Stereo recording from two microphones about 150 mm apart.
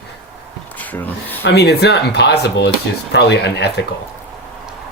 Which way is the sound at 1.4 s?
90° left.